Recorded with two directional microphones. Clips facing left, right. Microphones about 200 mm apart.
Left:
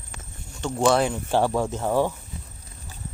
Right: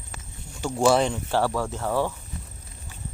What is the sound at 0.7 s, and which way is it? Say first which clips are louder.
Speech: even; 5° right (ahead or behind).